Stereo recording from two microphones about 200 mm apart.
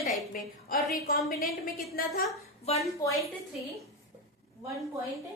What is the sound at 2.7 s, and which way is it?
Speech, 30° left (ahead or behind).